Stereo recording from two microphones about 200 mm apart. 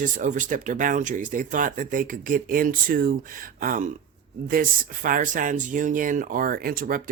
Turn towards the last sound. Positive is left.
turn(degrees=-45)  # may be behind; listen again after turning